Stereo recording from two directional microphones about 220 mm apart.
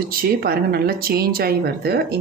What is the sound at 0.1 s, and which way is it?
Speech, 40° right (ahead or behind).